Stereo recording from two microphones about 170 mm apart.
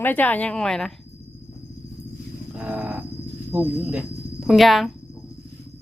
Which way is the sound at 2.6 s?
10° right (ahead or behind).